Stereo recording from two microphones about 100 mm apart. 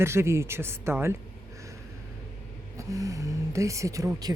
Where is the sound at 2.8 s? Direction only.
35° right (ahead or behind).